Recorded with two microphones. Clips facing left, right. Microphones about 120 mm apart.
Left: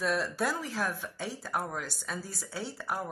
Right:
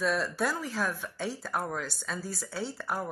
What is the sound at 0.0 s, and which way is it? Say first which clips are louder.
Speech: right 1 dB; 15° left (ahead or behind).